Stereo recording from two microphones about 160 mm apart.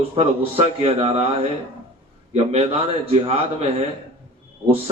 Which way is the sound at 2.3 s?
45° right (ahead or behind).